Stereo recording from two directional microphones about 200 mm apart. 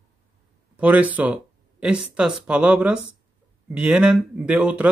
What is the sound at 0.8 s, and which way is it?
Speech, 5° right (ahead or behind).